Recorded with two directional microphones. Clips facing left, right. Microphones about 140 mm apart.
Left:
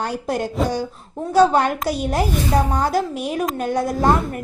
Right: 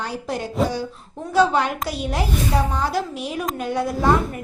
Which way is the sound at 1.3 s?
45° left (ahead or behind).